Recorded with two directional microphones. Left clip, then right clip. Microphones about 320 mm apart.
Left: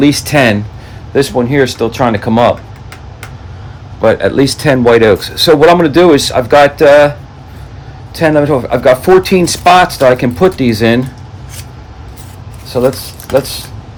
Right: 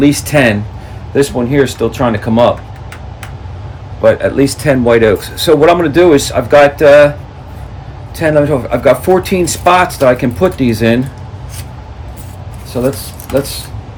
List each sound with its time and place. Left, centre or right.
0.0 s speech: left
4.0 s speech: left
8.1 s speech: left
12.7 s speech: left